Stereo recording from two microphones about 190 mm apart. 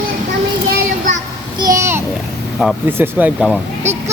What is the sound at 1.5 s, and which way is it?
Speech, 20° right (ahead or behind).